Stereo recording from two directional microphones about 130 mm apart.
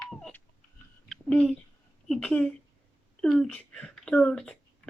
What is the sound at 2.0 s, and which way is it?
Speech, 5° left (ahead or behind).